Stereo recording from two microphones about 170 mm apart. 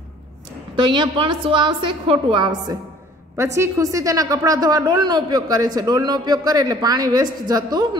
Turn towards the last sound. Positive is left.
turn(degrees=-25)  # may be behind; listen again after turning